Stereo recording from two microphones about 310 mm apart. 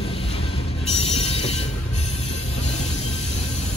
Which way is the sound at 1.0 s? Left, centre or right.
Centre.